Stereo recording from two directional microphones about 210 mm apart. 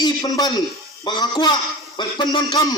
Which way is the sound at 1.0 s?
20° left (ahead or behind).